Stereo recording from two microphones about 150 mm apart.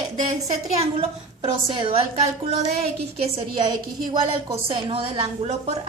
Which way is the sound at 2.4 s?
45° right (ahead or behind).